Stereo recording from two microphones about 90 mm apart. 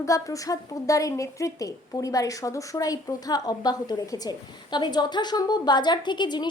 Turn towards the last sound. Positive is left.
turn(degrees=55)  # may be behind; listen again after turning